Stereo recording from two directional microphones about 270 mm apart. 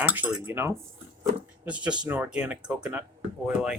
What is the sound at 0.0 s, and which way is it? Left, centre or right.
Speech, centre.